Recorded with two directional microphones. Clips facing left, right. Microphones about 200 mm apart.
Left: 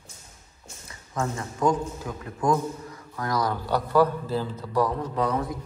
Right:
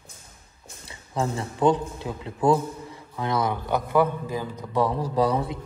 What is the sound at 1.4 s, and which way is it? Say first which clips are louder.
A man's voice: right 3 dB; 30° right (ahead or behind).